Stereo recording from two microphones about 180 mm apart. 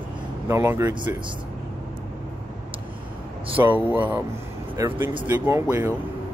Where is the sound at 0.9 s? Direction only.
25° right (ahead or behind).